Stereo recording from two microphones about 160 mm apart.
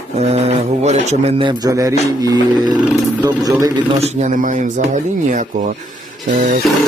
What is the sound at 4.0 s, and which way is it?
Speech, 45° right (ahead or behind).